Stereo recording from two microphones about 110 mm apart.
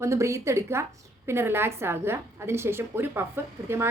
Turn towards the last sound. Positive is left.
turn(degrees=-20)  # may be behind; listen again after turning